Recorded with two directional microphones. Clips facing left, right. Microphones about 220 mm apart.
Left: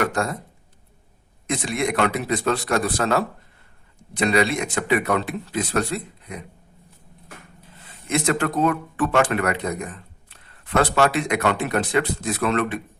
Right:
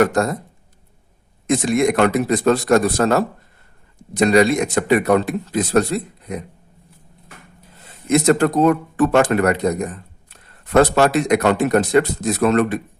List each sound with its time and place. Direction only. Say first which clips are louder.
0.0 s speech: right 7 dB; 40° right (ahead or behind)
1.5 s speech: right 8 dB; 45° right (ahead or behind)
7.9 s speech: right 8 dB; 40° right (ahead or behind)